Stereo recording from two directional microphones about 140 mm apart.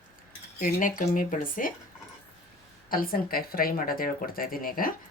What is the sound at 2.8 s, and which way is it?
Speech, 90° left.